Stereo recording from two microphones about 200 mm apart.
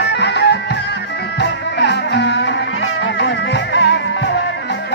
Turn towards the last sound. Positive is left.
turn(degrees=60)  # may be behind; listen again after turning